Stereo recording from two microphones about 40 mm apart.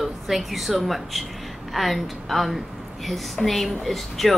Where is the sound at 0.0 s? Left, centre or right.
Centre.